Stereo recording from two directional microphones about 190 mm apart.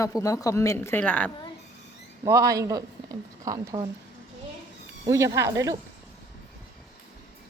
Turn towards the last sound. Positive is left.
turn(degrees=-15)  # may be behind; listen again after turning